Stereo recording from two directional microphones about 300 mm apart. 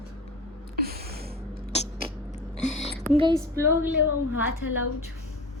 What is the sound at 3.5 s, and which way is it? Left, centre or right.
Speech, centre.